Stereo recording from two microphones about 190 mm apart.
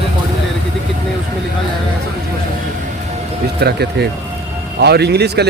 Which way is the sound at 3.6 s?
60° right (ahead or behind).